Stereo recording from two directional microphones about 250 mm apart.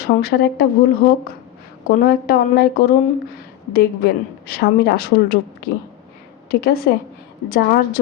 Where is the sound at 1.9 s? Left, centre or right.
Left.